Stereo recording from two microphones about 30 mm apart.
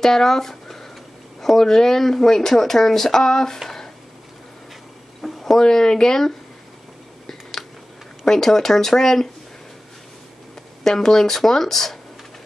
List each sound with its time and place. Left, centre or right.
0.0 s speech: centre
5.2 s speech: centre
8.3 s speech: centre
10.8 s speech: centre